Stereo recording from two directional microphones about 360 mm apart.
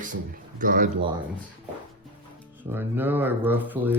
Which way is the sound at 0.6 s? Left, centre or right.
Right.